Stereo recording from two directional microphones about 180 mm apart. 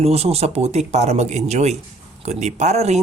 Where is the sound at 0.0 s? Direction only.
35° right (ahead or behind).